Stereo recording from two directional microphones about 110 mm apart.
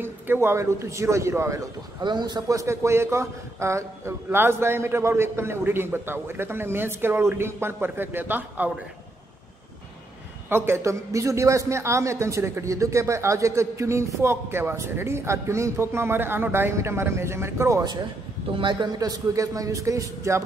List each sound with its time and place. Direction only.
0.0 s a man's voice: 20° right (ahead or behind)
2.0 s a man's voice: 40° right (ahead or behind); by 8.7 s 15° right (ahead or behind)
10.5 s a man's voice: 20° right (ahead or behind)
18.6 s a man's voice: 45° right (ahead or behind); by 20.4 s 30° right (ahead or behind)